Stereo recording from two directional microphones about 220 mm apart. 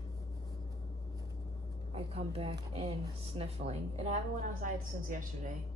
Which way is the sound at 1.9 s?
25° right (ahead or behind).